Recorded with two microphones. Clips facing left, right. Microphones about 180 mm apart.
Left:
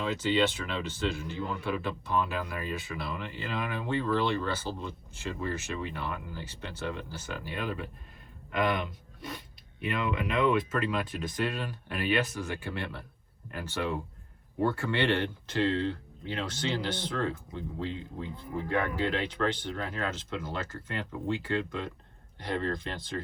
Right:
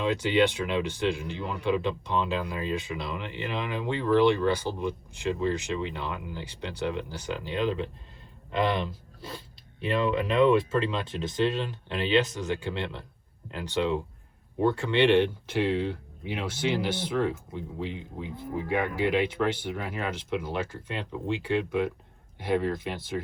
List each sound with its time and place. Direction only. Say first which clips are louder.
0.0 s speech: right 4 dB; 15° right (ahead or behind)